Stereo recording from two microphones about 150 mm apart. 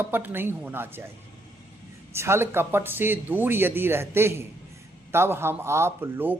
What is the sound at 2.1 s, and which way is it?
A man's voice, 15° right (ahead or behind).